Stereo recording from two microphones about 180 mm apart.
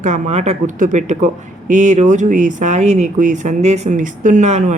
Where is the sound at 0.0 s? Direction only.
40° right (ahead or behind).